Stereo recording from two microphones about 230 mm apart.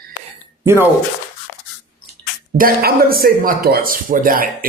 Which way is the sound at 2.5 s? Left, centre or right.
Right.